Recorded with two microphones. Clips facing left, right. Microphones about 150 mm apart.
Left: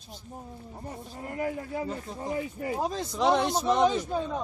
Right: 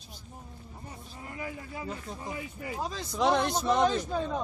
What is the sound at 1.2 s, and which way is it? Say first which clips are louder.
Speech: left 7 dB; 50° left (ahead or behind).